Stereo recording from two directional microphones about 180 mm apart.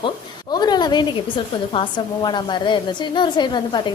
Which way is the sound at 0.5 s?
25° left (ahead or behind).